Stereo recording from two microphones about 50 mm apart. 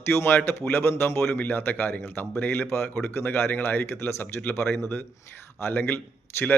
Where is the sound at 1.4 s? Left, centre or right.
Left.